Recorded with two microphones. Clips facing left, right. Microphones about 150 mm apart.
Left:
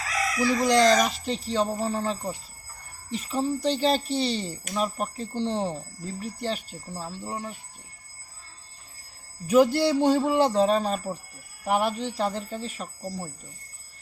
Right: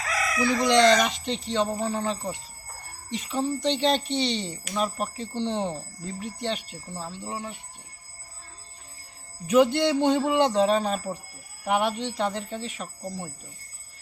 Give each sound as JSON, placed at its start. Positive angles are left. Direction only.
{"t": 0.6, "sound": "speech", "side_deg": 40}
{"t": 1.0, "sound": "speech", "side_deg": 5}
{"t": 9.5, "sound": "speech", "side_deg": 5}